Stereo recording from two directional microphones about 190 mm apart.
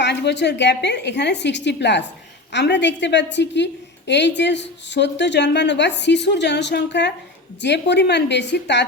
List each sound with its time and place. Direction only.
0.0 s a woman's voice: 65° left (ahead or behind)